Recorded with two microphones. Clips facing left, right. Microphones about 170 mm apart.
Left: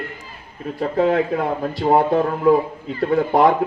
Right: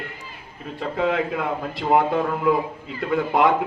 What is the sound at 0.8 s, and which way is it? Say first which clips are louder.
A man's voice: left 5 dB; 35° left (ahead or behind).